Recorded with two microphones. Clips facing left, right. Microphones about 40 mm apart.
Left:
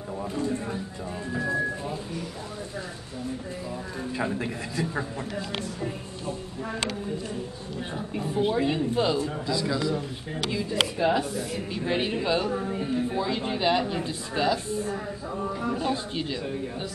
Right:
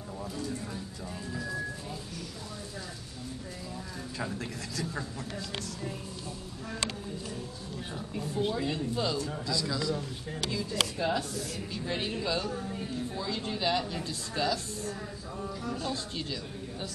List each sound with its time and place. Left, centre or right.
0.2 s speech: left
4.2 s speech: left
8.1 s speech: left